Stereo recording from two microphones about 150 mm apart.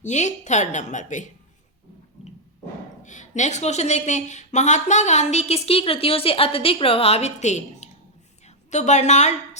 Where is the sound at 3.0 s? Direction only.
55° left (ahead or behind).